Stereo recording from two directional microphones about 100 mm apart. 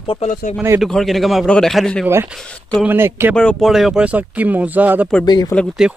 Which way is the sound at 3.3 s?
10° left (ahead or behind).